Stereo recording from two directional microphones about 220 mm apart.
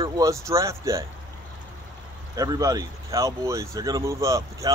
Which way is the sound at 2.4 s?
15° right (ahead or behind).